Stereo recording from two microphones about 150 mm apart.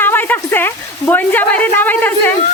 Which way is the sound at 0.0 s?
15° left (ahead or behind).